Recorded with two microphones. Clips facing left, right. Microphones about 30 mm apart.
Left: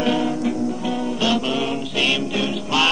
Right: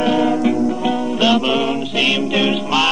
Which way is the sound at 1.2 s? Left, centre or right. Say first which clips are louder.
Right 6 dB; centre.